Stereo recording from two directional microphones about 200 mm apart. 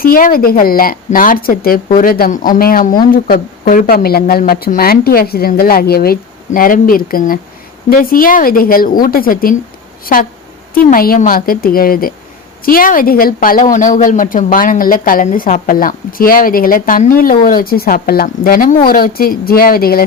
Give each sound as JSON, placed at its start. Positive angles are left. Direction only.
{"t": 0.0, "sound": "a woman's voice", "side_deg": 45}